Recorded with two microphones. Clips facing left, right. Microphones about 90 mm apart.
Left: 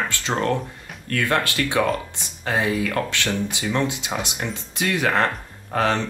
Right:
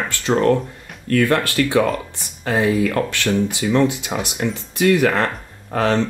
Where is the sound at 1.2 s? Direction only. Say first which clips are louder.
Right 4 dB; 20° left (ahead or behind).